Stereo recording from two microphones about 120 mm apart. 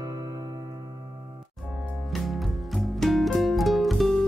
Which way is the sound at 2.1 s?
Centre (ahead or behind).